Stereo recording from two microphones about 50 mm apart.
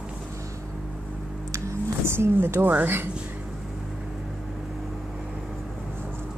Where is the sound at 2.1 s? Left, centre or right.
Right.